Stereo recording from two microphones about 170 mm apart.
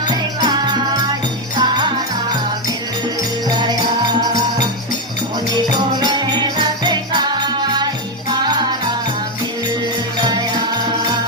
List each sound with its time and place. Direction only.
0.1 s music: 25° right (ahead or behind)
4.2 s music: 20° right (ahead or behind)
10.2 s music: 25° right (ahead or behind)